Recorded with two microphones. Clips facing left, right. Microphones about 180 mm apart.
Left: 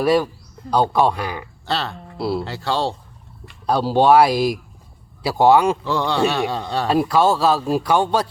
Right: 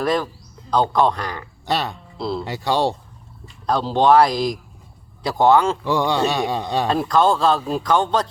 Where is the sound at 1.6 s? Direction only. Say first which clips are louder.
Right 2 dB; 15° right (ahead or behind).